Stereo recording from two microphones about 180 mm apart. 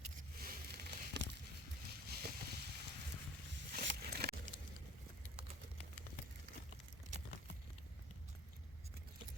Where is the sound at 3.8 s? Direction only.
60° right (ahead or behind).